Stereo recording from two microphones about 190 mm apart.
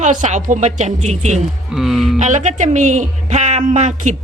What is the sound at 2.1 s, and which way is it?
Speech, 40° right (ahead or behind).